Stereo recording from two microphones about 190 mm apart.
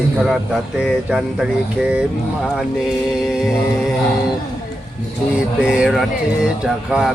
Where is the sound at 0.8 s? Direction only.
Centre (ahead or behind).